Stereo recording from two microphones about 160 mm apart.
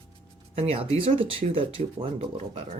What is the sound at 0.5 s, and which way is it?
Speech, 35° right (ahead or behind).